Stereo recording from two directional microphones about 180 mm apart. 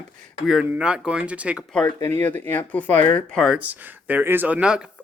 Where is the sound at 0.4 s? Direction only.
5° right (ahead or behind).